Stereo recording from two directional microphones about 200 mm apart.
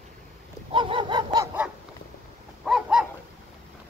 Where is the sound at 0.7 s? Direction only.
25° right (ahead or behind).